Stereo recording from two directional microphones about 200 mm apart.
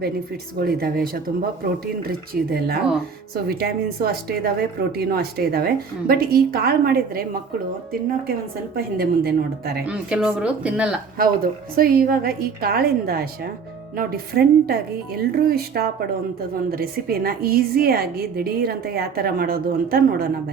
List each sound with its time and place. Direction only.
0.6 s speech: 50° right (ahead or behind)
8.7 s speech: 50° right (ahead or behind)
9.8 s speech: 5° right (ahead or behind)
11.8 s speech: 45° right (ahead or behind)